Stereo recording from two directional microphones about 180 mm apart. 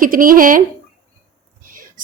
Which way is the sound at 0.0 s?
50° right (ahead or behind).